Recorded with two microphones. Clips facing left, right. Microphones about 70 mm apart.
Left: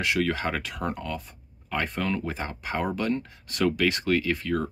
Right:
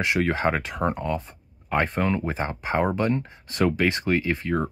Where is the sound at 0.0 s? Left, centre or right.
Right.